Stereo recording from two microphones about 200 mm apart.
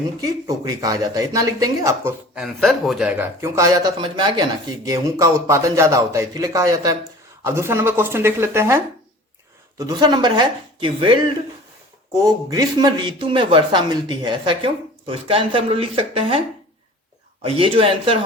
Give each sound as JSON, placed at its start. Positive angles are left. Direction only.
{"t": 0.2, "sound": "speech", "side_deg": -15}
{"t": 17.4, "sound": "speech", "side_deg": -25}